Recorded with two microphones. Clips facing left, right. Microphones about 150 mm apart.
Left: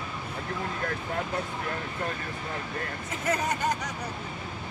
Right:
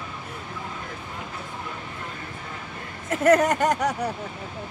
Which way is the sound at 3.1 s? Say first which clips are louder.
Right 11 dB; 70° right (ahead or behind).